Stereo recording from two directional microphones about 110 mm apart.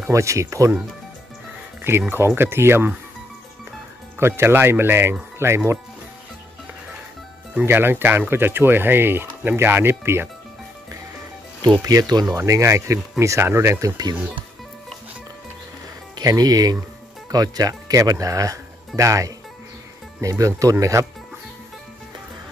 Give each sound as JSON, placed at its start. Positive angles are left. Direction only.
{"t": 0.0, "sound": "speech", "side_deg": -30}
{"t": 1.8, "sound": "speech", "side_deg": -20}
{"t": 4.2, "sound": "speech", "side_deg": -20}
{"t": 7.5, "sound": "speech", "side_deg": -20}
{"t": 11.8, "sound": "speech", "side_deg": -35}
{"t": 16.2, "sound": "speech", "side_deg": -35}